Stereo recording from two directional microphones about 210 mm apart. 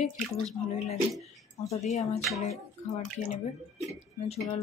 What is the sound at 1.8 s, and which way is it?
Speech, 35° left (ahead or behind).